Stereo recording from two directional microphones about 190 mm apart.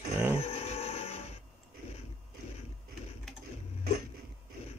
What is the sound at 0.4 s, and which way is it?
Music, 30° left (ahead or behind).